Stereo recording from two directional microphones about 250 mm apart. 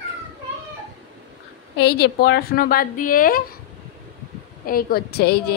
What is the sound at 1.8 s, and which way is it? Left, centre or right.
Speech, left.